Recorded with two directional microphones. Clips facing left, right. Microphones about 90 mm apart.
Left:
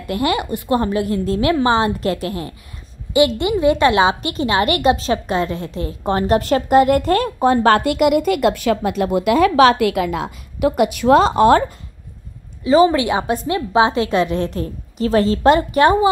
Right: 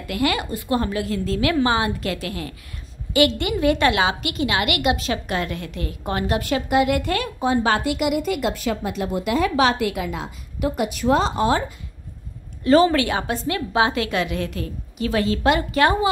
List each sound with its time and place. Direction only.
0.0 s a woman's voice: 25° left (ahead or behind); by 11.6 s 65° left (ahead or behind)
12.8 s a woman's voice: 20° left (ahead or behind)
15.7 s a woman's voice: 20° left (ahead or behind)